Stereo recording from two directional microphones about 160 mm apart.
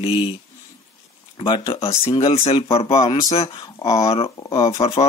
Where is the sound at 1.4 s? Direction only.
30° left (ahead or behind).